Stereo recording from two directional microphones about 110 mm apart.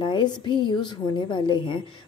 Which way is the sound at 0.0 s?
45° left (ahead or behind).